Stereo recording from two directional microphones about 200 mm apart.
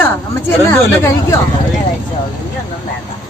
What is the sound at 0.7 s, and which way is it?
Speech, 10° left (ahead or behind).